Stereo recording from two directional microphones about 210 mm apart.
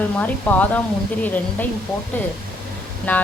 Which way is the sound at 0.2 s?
10° left (ahead or behind).